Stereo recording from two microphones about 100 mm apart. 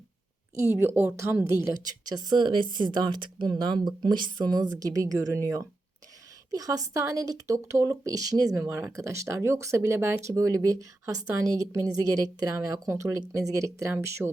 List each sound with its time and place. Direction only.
0.5 s speech: 25° right (ahead or behind)